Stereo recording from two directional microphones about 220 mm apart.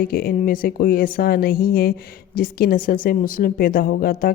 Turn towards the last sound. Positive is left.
turn(degrees=40)  # may be behind; listen again after turning